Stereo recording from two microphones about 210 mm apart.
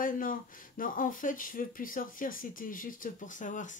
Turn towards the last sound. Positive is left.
turn(degrees=35)  # may be behind; listen again after turning